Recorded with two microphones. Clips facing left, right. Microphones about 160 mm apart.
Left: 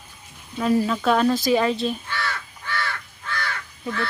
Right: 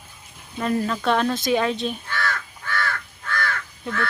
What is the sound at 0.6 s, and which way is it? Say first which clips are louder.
Speech: left 3 dB; 5° left (ahead or behind).